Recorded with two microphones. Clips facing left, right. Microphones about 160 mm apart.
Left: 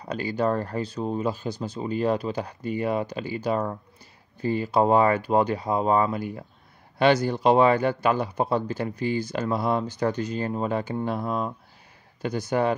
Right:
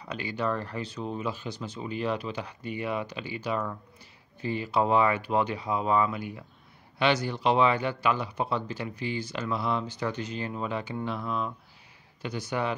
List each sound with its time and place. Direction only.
0.0 s a man's voice: 40° left (ahead or behind)